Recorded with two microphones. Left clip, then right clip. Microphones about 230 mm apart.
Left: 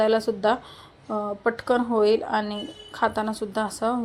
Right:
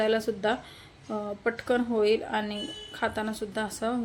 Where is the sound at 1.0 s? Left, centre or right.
Centre.